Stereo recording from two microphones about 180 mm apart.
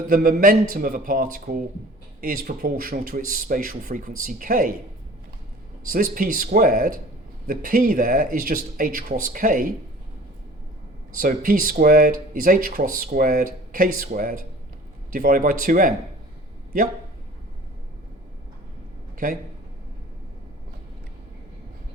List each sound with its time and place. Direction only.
0.1 s speech: 50° right (ahead or behind)
5.9 s speech: 50° right (ahead or behind)
11.2 s speech: 50° right (ahead or behind)